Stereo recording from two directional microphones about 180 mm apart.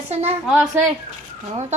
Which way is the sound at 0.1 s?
35° right (ahead or behind).